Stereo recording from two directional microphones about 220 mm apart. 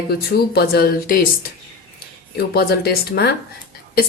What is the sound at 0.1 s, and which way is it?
Speech, 45° left (ahead or behind).